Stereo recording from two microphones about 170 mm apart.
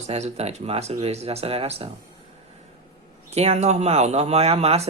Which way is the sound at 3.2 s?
40° right (ahead or behind).